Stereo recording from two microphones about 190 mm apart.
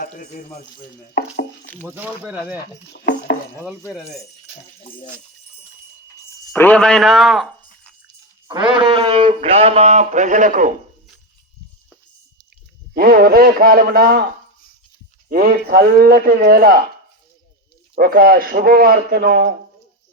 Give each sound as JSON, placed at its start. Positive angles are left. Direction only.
{"t": 0.0, "sound": "speech", "side_deg": 50}
{"t": 1.2, "sound": "chopping", "side_deg": 65}
{"t": 1.6, "sound": "a sound", "side_deg": 10}
{"t": 1.9, "sound": "speech", "side_deg": -10}
{"t": 6.5, "sound": "a man's voice", "side_deg": 5}
{"t": 8.4, "sound": "speech", "side_deg": -25}
{"t": 12.9, "sound": "speech", "side_deg": -50}
{"t": 15.3, "sound": "speech", "side_deg": -50}
{"t": 17.9, "sound": "speech", "side_deg": -50}